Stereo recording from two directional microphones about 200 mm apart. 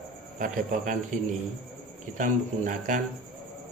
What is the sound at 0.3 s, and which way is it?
Speech, 40° right (ahead or behind).